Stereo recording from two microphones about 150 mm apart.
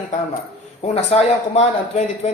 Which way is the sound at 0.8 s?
45° left (ahead or behind).